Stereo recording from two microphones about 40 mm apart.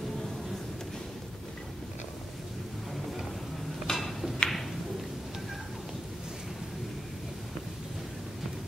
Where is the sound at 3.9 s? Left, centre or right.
Centre.